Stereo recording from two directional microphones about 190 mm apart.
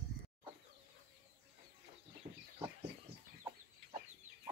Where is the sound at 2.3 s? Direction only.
50° right (ahead or behind).